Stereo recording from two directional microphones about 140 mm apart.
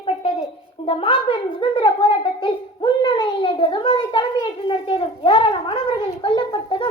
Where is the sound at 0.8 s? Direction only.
40° left (ahead or behind).